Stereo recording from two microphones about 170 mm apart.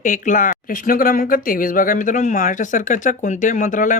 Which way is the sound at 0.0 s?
50° left (ahead or behind).